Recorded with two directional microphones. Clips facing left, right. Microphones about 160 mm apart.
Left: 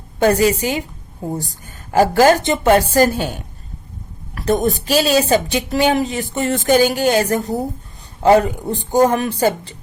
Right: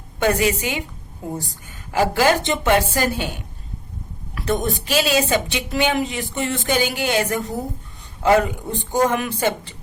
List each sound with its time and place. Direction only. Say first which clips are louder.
0.2 s a woman's voice: left 5 dB; 35° left (ahead or behind)
1.9 s a woman's voice: left 5 dB; 45° left (ahead or behind)